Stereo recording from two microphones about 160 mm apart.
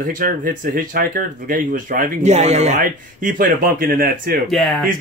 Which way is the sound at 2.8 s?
60° right (ahead or behind).